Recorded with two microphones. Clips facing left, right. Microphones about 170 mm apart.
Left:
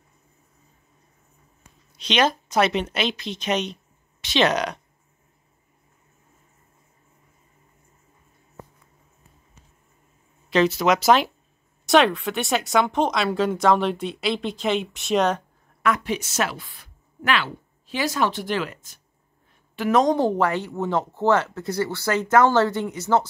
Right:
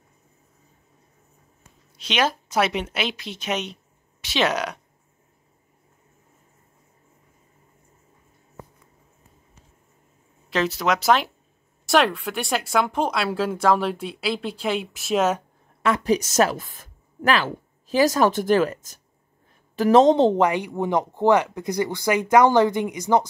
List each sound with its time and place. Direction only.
2.0 s speech: 5° right (ahead or behind)
10.5 s speech: centre (ahead or behind)
15.8 s a woman's voice: 35° right (ahead or behind)
20.0 s speech: 20° right (ahead or behind)